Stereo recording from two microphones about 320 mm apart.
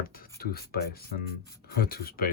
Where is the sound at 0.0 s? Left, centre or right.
Left.